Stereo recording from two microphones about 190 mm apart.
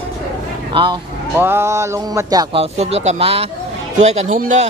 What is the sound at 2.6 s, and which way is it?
Speech, 35° right (ahead or behind).